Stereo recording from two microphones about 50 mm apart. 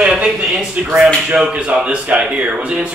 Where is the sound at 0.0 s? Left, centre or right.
Centre.